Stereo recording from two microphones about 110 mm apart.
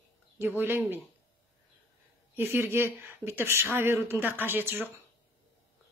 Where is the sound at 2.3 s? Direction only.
20° right (ahead or behind).